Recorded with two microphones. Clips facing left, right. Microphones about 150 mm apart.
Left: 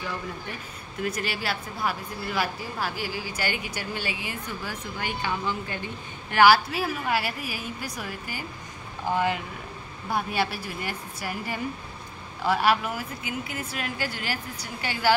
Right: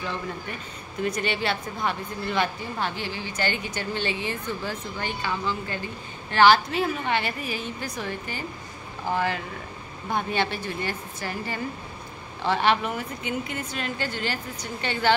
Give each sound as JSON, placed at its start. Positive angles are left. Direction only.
{"t": 1.0, "sound": "speech", "side_deg": 5}